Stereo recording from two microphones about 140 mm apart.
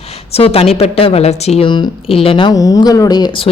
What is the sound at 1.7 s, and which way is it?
Speech, 40° left (ahead or behind).